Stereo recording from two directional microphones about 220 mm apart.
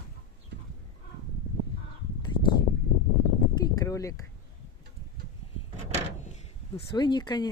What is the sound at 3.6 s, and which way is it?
Speech, 15° left (ahead or behind).